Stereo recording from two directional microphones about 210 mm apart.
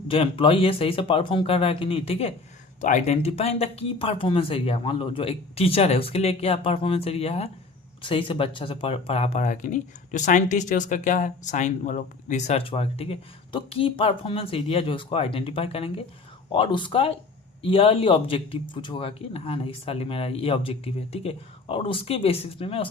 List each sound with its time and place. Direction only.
0.1 s speech: 25° left (ahead or behind)